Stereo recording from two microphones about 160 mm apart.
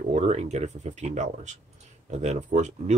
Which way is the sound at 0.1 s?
45° right (ahead or behind).